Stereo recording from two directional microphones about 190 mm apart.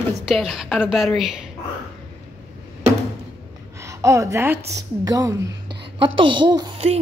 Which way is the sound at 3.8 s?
15° right (ahead or behind).